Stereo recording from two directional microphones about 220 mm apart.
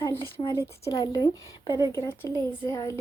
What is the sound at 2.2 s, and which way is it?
Speech, 15° left (ahead or behind).